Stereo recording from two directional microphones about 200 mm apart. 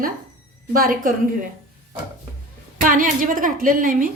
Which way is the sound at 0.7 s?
45° right (ahead or behind).